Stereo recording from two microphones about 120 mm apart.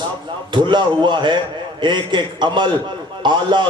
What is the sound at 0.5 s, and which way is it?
A man's voice, 40° right (ahead or behind).